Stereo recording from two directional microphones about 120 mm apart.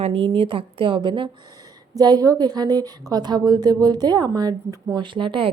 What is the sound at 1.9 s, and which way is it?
A woman's voice, 35° right (ahead or behind).